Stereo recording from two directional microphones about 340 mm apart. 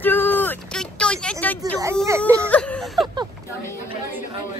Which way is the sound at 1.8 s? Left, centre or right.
Centre.